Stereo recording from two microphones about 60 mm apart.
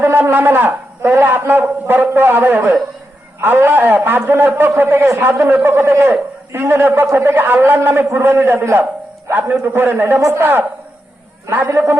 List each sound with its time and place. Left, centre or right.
0.0 s a man's voice: right
10.2 s a man's voice: right
10.4 s a man's voice: right
11.8 s a man's voice: right